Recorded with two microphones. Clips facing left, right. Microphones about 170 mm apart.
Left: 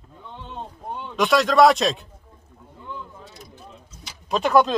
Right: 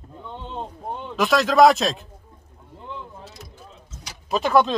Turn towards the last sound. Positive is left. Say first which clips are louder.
# left 1 dB
turn(degrees=0)  # may be behind; listen again after turning